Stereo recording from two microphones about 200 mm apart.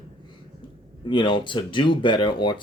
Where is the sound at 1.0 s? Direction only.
25° left (ahead or behind).